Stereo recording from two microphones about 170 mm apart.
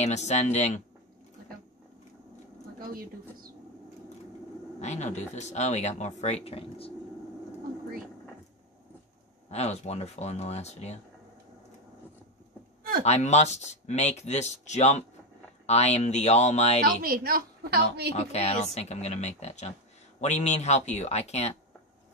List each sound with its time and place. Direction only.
0.0 s speech: 40° left (ahead or behind)
2.8 s a woman's voice: 60° right (ahead or behind)
4.7 s speech: 45° left (ahead or behind)
9.5 s speech: 40° left (ahead or behind)
13.0 s speech: 40° left (ahead or behind)
16.8 s a woman's voice: 60° right (ahead or behind)
18.1 s speech: 40° left (ahead or behind)